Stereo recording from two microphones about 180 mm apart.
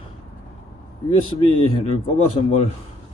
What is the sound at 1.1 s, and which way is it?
A man's voice, 30° left (ahead or behind).